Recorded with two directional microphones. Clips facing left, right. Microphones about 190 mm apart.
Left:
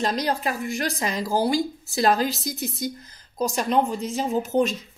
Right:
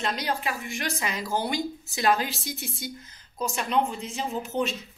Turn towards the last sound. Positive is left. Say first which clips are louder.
# left 6 dB
turn(degrees=40)  # may be behind; listen again after turning